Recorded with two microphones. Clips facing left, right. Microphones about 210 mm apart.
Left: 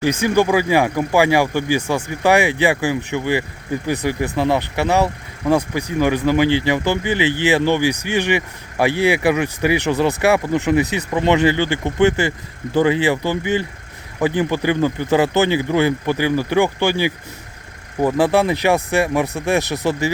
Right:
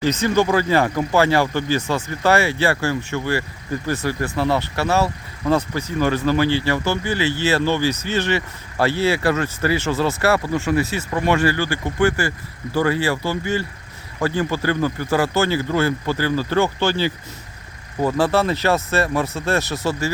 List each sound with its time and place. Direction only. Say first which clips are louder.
0.0 s speech: left 2 dB; 10° left (ahead or behind)